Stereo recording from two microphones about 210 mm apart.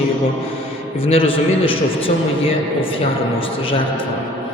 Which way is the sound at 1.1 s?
25° left (ahead or behind).